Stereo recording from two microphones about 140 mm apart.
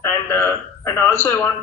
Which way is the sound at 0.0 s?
20° left (ahead or behind).